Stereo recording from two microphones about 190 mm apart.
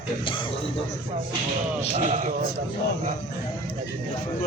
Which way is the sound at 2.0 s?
35° right (ahead or behind).